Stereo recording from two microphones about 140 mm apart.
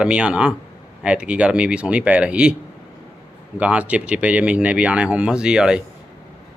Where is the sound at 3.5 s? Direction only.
10° right (ahead or behind).